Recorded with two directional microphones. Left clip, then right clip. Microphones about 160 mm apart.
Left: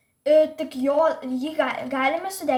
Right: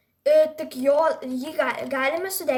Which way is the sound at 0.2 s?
40° right (ahead or behind).